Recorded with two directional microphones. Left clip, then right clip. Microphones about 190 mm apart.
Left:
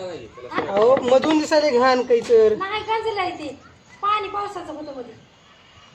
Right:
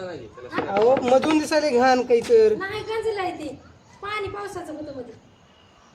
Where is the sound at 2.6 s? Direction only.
55° right (ahead or behind).